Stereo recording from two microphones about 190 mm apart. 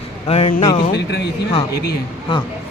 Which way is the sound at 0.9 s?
60° left (ahead or behind).